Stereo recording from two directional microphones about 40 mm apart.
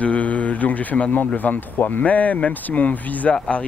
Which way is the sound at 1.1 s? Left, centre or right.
Left.